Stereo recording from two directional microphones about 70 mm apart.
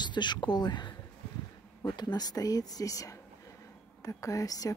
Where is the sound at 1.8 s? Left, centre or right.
Left.